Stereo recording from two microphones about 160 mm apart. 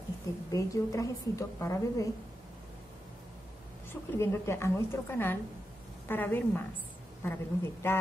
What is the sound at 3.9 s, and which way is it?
A woman's voice, 15° left (ahead or behind).